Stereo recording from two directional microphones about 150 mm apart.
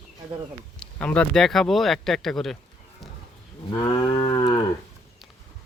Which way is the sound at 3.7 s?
30° left (ahead or behind).